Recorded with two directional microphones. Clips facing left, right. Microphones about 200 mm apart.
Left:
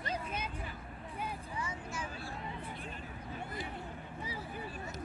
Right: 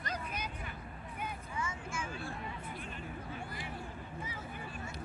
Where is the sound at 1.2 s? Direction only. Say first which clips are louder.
Even; 35° left (ahead or behind).